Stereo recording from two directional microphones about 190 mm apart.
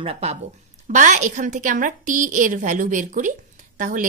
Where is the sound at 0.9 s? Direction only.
40° right (ahead or behind).